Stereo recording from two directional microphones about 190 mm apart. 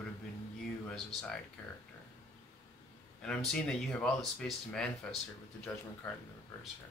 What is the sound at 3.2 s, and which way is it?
A man's voice, 5° left (ahead or behind).